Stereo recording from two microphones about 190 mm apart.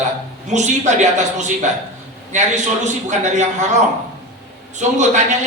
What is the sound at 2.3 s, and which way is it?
A man's voice, 40° right (ahead or behind).